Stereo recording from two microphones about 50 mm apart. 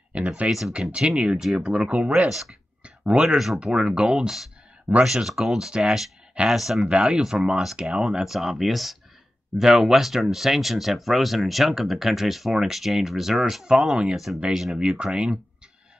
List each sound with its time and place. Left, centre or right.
0.1 s speech: right
0.5 s speech: centre
0.9 s speech: centre
2.2 s speech: centre
2.8 s a sound: centre
3.5 s speech: centre
6.9 s speech: right; by 14.8 s centre
15.0 s speech: centre